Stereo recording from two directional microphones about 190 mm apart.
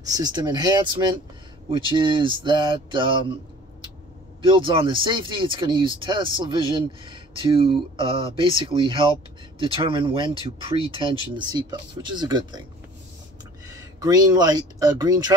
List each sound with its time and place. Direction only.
0.0 s speech: 20° right (ahead or behind)
4.5 s speech: 25° right (ahead or behind)
13.7 s speech: 20° right (ahead or behind)